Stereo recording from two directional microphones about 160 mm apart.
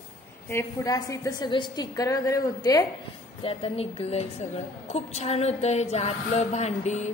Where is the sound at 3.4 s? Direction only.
35° left (ahead or behind).